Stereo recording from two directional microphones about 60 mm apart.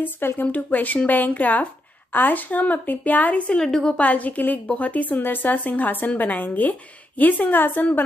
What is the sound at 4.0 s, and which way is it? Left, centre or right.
A woman's voice, left.